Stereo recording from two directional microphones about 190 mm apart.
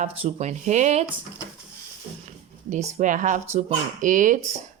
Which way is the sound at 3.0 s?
40° right (ahead or behind).